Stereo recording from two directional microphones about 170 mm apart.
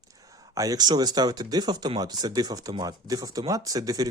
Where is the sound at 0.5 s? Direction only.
20° right (ahead or behind).